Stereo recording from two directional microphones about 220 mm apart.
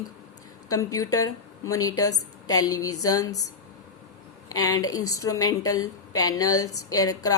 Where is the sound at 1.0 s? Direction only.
75° left (ahead or behind).